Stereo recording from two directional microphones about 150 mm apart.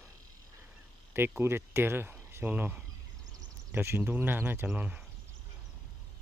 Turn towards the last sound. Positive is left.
turn(degrees=-10)  # may be behind; listen again after turning